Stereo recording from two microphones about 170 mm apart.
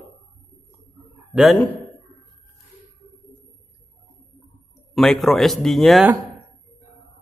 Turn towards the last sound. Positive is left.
turn(degrees=0)  # may be behind; listen again after turning